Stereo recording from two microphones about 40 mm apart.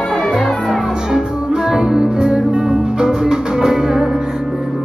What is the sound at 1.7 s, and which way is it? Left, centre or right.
Music, centre.